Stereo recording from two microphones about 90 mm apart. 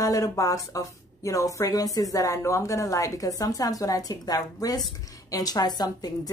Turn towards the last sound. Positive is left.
turn(degrees=50)  # may be behind; listen again after turning